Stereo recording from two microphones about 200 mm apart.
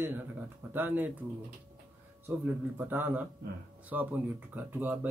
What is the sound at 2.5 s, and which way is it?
Speech, 10° right (ahead or behind).